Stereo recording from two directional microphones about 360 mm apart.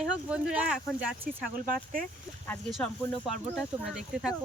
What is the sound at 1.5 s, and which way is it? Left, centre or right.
Speech, right.